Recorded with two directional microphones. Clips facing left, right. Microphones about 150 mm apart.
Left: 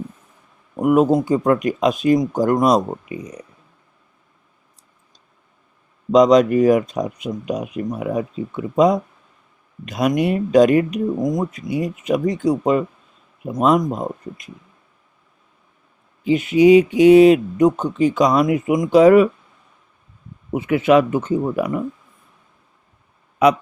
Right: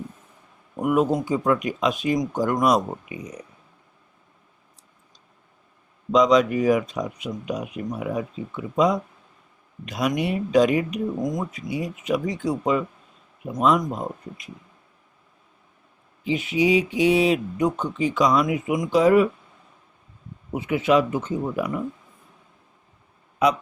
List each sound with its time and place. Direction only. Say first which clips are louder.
0.8 s speech: left 6 dB; 40° left (ahead or behind)
6.1 s speech: left 5 dB; 45° left (ahead or behind)
11.2 s speech: left 6 dB; 35° left (ahead or behind)
11.7 s speech: left 4 dB; 50° left (ahead or behind)
16.2 s speech: left 9 dB; 50° left (ahead or behind)
18.9 s speech: left 6 dB; 75° left (ahead or behind)
20.6 s speech: left 5 dB; 60° left (ahead or behind)